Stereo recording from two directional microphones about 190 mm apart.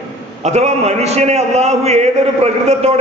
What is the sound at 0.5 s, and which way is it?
A man's voice, 35° right (ahead or behind).